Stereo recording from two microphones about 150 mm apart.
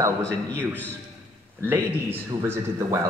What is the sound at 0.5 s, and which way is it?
Speech, 10° left (ahead or behind).